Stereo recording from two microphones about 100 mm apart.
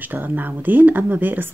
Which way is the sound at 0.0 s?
20° right (ahead or behind).